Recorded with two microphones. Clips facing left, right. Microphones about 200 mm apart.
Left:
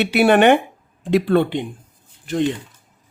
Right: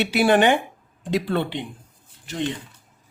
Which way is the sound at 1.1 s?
50° left (ahead or behind).